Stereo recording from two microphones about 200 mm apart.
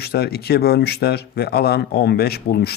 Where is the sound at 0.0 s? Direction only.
50° left (ahead or behind).